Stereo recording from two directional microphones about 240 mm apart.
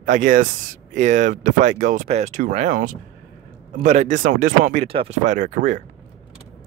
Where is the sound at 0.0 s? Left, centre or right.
Right.